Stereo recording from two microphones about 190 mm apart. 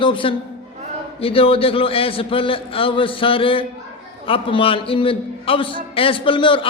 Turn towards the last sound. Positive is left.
turn(degrees=25)  # may be behind; listen again after turning